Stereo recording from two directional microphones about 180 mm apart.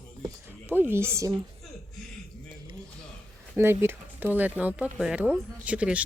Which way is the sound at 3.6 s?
15° right (ahead or behind).